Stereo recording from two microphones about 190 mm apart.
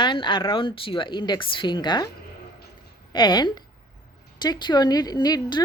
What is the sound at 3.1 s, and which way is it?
A woman's voice, 25° left (ahead or behind).